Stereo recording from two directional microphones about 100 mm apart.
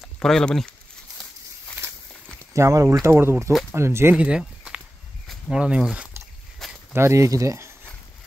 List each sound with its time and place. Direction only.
0.0 s speech: 5° left (ahead or behind)
2.3 s speech: 30° right (ahead or behind)
4.2 s a sound: 10° right (ahead or behind)
5.3 s speech: 10° right (ahead or behind)
6.9 s speech: 25° right (ahead or behind)